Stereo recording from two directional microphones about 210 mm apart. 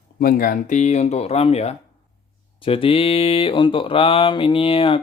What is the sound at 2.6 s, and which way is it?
Mantra, 25° left (ahead or behind).